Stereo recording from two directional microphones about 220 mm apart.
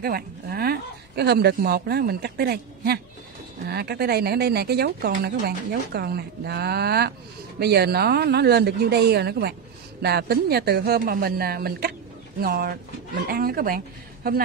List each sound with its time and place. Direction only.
0.0 s speech: 45° right (ahead or behind)